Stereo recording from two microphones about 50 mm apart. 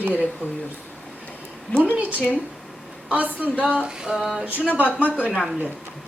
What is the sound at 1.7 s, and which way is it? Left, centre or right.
Speech, left.